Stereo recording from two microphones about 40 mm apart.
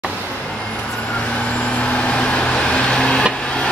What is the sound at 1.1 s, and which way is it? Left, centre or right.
Vehicle, left.